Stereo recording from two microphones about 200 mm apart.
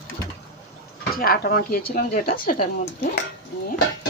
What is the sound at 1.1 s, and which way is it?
A woman's voice, 45° left (ahead or behind).